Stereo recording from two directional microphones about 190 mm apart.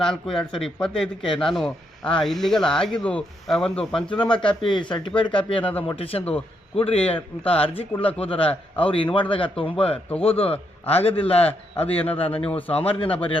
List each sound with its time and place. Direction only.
0.0 s speech: centre (ahead or behind)
1.2 s a man's voice: 25° left (ahead or behind)
2.2 s speech: centre (ahead or behind)
4.7 s a man's voice: 25° left (ahead or behind)
12.5 s speech: 10° left (ahead or behind)
12.7 s a man's voice: 30° left (ahead or behind)